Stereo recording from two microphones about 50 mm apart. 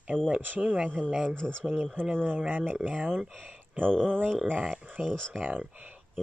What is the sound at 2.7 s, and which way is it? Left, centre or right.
Speech, right.